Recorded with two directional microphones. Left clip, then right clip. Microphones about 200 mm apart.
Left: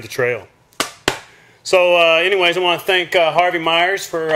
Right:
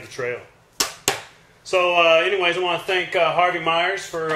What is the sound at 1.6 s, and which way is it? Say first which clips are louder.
Speech: left 5 dB; 50° left (ahead or behind).